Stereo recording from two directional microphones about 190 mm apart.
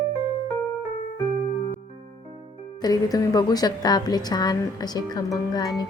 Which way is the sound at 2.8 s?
20° left (ahead or behind).